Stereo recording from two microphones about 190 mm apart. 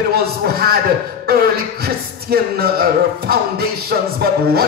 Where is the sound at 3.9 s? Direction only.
55° right (ahead or behind).